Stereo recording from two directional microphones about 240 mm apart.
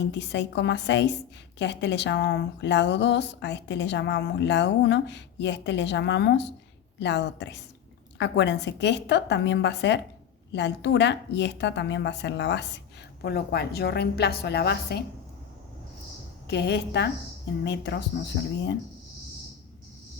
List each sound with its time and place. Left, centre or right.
0.0 s a woman's voice: left
16.5 s a woman's voice: left